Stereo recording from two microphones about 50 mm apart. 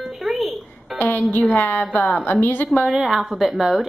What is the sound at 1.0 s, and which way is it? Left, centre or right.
A woman's voice, left.